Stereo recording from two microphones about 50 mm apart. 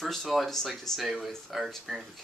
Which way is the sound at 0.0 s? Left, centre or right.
Centre.